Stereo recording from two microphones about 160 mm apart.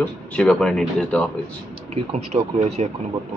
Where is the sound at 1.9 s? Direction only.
40° right (ahead or behind).